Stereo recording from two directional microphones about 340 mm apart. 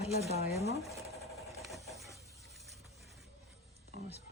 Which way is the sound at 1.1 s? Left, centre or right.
Centre.